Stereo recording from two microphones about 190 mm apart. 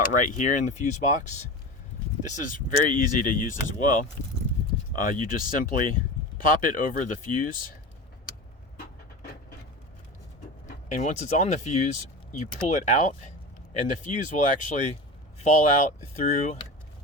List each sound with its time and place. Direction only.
0.1 s speech: 40° left (ahead or behind)
5.0 s speech: 45° left (ahead or behind)
10.7 s speech: 40° left (ahead or behind)